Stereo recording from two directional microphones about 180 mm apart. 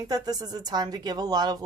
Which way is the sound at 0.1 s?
20° right (ahead or behind).